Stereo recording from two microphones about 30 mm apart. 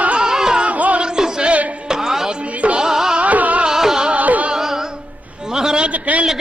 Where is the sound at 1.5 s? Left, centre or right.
Right.